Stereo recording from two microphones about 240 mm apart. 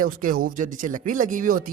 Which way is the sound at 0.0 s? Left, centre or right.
Right.